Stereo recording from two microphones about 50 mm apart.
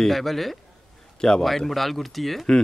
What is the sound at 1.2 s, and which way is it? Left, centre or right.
Speech, centre.